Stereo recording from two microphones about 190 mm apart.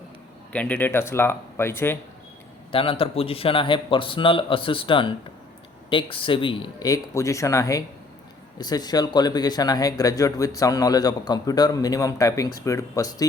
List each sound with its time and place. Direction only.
0.5 s speech: 5° left (ahead or behind)
2.7 s speech: 30° left (ahead or behind)